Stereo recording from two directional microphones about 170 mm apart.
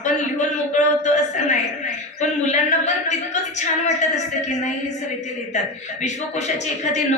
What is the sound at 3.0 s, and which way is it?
A woman's voice, 45° left (ahead or behind).